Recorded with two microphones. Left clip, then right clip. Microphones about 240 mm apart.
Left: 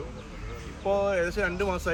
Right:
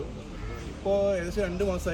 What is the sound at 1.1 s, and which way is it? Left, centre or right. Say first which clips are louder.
Speech: left 2 dB; centre.